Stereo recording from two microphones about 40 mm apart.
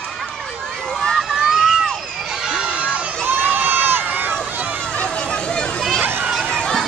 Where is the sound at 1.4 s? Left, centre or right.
Centre.